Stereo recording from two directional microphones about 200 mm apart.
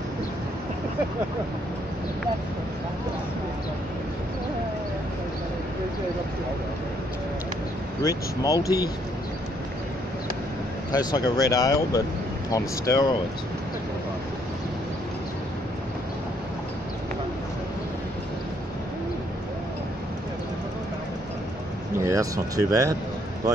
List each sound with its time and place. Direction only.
8.4 s speech: 20° left (ahead or behind)
10.9 s speech: 20° left (ahead or behind)
22.0 s speech: 15° right (ahead or behind)